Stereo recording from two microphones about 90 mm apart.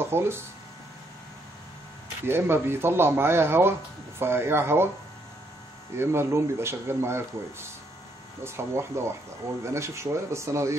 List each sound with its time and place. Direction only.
0.0 s speech: 25° right (ahead or behind)
2.2 s speech: 25° right (ahead or behind)
5.9 s speech: 30° right (ahead or behind)